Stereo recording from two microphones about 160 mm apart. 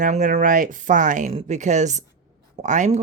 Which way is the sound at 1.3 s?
40° right (ahead or behind).